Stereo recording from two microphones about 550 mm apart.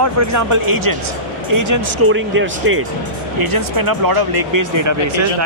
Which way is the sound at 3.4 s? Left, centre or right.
Right.